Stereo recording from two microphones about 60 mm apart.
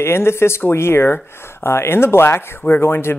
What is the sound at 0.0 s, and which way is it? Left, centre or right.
Speech, left.